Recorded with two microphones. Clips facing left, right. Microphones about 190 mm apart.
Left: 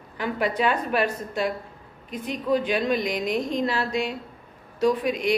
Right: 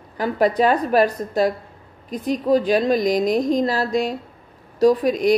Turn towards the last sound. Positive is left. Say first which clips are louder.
# right 6 dB
turn(degrees=-40)  # may be behind; listen again after turning